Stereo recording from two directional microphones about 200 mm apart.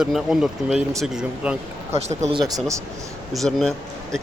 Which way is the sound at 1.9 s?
30° right (ahead or behind).